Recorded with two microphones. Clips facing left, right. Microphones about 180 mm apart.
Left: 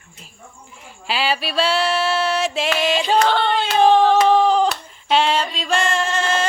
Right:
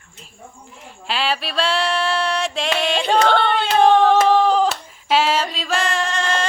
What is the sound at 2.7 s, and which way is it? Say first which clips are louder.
Singing: even; 5° left (ahead or behind).